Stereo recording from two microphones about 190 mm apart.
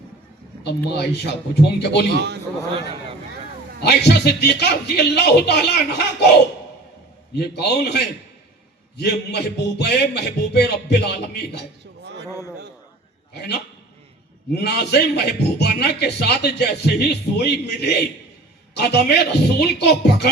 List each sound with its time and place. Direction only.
0.9 s a man's voice: 60° left (ahead or behind)
2.1 s a man's voice: 65° right (ahead or behind)
3.8 s a man's voice: 60° left (ahead or behind)
7.3 s a man's voice: 60° left (ahead or behind)
13.3 s a man's voice: 60° left (ahead or behind)